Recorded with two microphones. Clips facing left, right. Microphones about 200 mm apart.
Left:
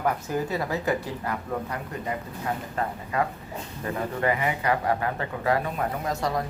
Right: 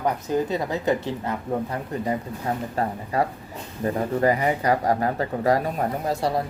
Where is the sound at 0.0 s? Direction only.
20° right (ahead or behind).